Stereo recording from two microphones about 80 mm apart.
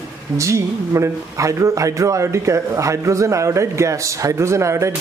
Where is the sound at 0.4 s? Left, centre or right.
Right.